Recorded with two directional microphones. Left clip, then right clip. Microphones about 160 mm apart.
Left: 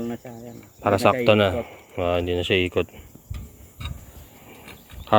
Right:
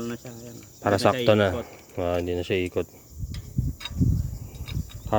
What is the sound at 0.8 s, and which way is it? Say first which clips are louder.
Speech: left 3 dB; 35° right (ahead or behind).